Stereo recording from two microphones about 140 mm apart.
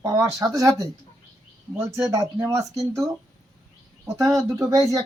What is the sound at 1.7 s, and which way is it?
Speech, 20° right (ahead or behind).